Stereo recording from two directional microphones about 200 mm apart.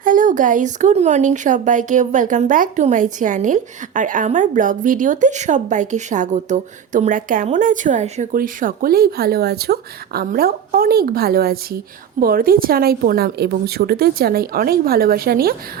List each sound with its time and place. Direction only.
0.0 s speech: 40° right (ahead or behind)